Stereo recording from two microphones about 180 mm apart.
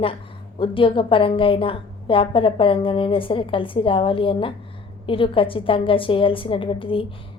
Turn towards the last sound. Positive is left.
turn(degrees=30)  # may be behind; listen again after turning